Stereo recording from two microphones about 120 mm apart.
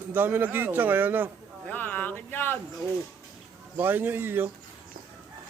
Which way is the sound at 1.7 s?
15° left (ahead or behind).